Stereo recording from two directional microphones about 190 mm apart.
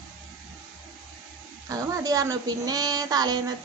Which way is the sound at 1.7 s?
20° right (ahead or behind).